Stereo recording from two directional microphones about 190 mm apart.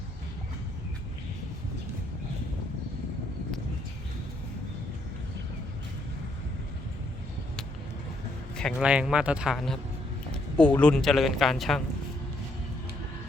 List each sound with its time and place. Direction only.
8.5 s speech: centre (ahead or behind)